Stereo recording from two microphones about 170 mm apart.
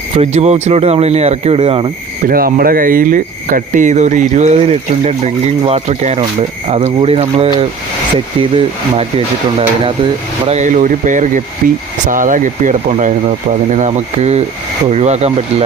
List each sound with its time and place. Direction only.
0.1 s speech: 40° right (ahead or behind)
2.2 s speech: 60° right (ahead or behind); by 7.7 s 35° right (ahead or behind)
9.0 s speech: 35° right (ahead or behind)